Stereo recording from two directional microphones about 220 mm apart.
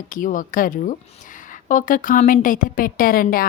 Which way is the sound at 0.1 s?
35° left (ahead or behind).